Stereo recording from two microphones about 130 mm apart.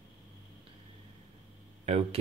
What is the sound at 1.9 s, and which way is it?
Speech, 55° right (ahead or behind).